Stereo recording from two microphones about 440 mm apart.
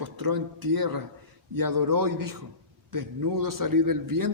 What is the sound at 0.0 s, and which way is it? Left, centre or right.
A man's voice, right.